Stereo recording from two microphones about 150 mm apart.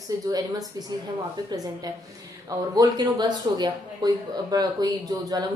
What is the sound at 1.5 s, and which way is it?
Speech, 25° right (ahead or behind).